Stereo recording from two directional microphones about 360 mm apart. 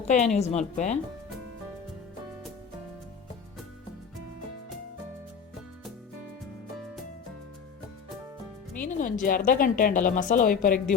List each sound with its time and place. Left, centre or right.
0.0 s a woman's voice: centre
8.8 s a woman's voice: left